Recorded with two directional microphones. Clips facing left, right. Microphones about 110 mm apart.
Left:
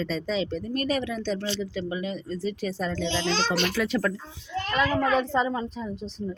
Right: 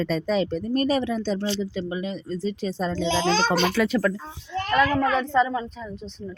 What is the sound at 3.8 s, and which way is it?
Speech, 90° right.